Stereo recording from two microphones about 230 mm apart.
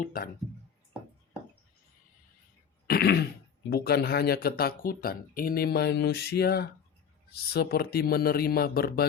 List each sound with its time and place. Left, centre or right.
0.0 s speech: left
2.8 s speech: left